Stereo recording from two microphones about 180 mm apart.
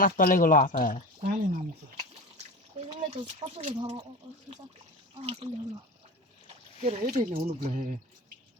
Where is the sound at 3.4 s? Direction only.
35° right (ahead or behind).